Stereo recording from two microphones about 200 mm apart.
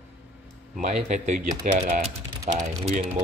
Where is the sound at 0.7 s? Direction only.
40° right (ahead or behind).